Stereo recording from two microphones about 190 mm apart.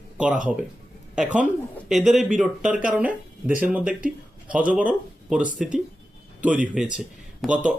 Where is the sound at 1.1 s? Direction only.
5° right (ahead or behind).